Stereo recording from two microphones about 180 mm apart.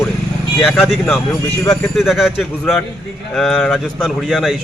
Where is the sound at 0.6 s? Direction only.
Centre (ahead or behind).